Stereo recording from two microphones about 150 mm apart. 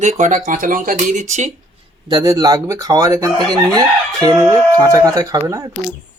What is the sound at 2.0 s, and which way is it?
Speech, 25° right (ahead or behind).